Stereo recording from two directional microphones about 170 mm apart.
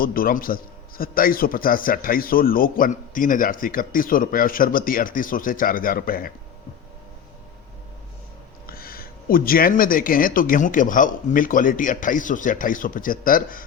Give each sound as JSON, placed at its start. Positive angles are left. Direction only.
{"t": 0.0, "sound": "a man's voice", "side_deg": 60}
{"t": 8.6, "sound": "a man's voice", "side_deg": 60}